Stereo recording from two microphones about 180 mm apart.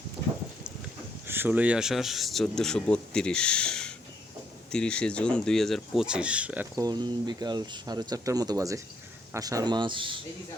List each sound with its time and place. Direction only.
1.3 s speech: 10° right (ahead or behind)
6.8 s speech: 25° right (ahead or behind)